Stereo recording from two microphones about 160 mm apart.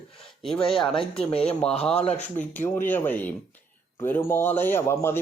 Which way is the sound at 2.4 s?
10° left (ahead or behind).